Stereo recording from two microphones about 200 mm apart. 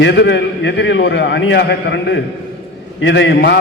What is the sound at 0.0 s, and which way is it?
A man's voice, 65° left (ahead or behind).